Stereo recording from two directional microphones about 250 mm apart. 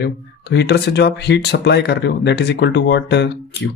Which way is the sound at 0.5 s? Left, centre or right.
Left.